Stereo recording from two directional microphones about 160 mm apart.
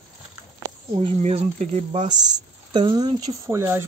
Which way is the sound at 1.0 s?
45° right (ahead or behind).